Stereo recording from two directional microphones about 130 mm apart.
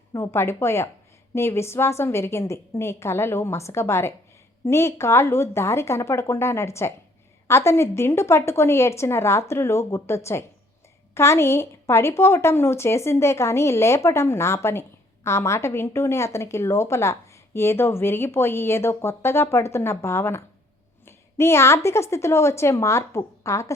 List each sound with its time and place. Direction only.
0.1 s a woman's voice: 20° left (ahead or behind)
21.0 s a sound: 20° left (ahead or behind)
21.8 s a woman's voice: 20° left (ahead or behind)